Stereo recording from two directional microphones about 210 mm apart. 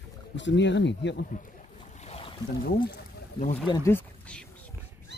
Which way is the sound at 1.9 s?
30° left (ahead or behind).